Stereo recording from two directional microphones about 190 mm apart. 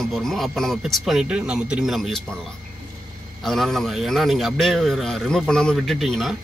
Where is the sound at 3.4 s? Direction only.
Centre (ahead or behind).